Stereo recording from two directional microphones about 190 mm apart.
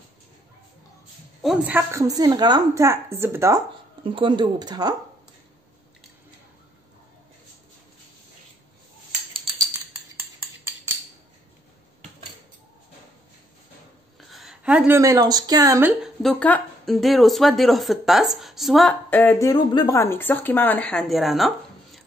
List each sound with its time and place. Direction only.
1.4 s a woman's voice: 5° right (ahead or behind)
4.0 s speech: 25° right (ahead or behind)
14.3 s speech: centre (ahead or behind); by 15.9 s 15° right (ahead or behind)
16.0 s a woman's voice: centre (ahead or behind)